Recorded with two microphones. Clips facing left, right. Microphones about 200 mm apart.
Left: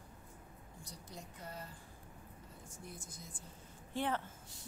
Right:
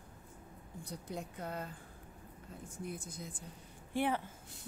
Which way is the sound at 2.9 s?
60° right (ahead or behind).